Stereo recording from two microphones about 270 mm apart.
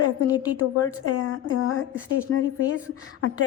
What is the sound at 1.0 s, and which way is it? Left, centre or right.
Speech, left.